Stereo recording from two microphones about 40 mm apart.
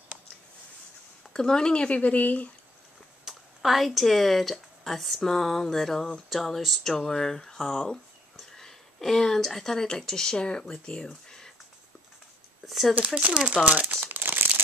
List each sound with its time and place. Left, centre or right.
1.3 s speech: centre
2.0 s speech: left
3.3 s speech: centre
12.6 s speech: centre
12.9 s speech: right
13.7 s speech: right
13.9 s crumpling: right